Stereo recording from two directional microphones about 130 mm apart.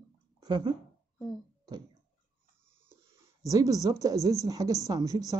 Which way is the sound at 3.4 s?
30° right (ahead or behind).